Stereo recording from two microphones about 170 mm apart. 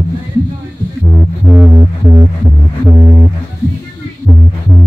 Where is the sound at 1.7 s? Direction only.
20° right (ahead or behind).